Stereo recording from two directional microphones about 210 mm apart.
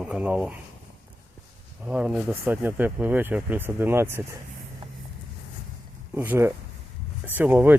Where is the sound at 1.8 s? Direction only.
5° right (ahead or behind).